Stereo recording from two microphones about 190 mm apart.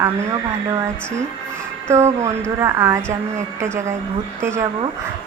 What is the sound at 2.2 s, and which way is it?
Speech, 15° right (ahead or behind).